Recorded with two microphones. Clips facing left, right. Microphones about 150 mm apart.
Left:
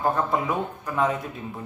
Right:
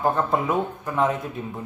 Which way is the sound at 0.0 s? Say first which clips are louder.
Right 2 dB; 20° right (ahead or behind).